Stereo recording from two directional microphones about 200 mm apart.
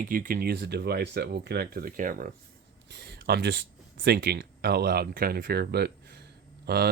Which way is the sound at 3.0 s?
50° right (ahead or behind).